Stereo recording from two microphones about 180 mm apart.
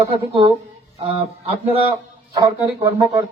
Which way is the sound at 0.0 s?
30° right (ahead or behind).